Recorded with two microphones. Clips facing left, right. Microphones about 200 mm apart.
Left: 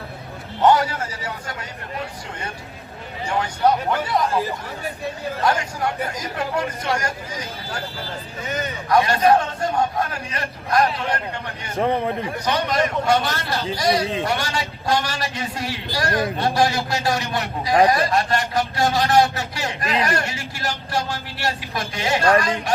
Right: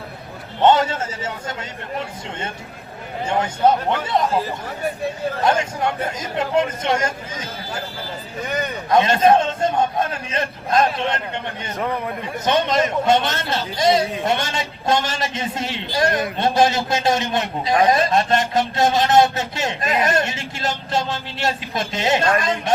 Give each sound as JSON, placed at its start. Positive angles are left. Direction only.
{"t": 0.6, "sound": "a man's voice", "side_deg": -25}
{"t": 3.2, "sound": "a man's voice", "side_deg": -25}
{"t": 5.5, "sound": "a man's voice", "side_deg": -25}
{"t": 8.9, "sound": "a man's voice", "side_deg": -20}
{"t": 11.8, "sound": "a man's voice", "side_deg": 30}
{"t": 12.5, "sound": "a man's voice", "side_deg": -20}